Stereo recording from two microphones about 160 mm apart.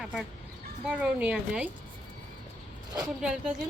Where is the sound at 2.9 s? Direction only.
5° right (ahead or behind).